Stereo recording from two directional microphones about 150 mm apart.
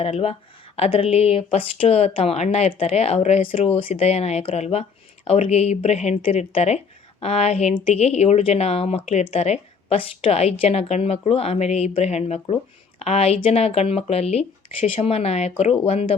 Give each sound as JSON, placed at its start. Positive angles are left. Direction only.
{"t": 0.0, "sound": "speech", "side_deg": 40}